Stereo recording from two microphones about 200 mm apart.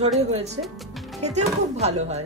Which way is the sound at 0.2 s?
35° right (ahead or behind).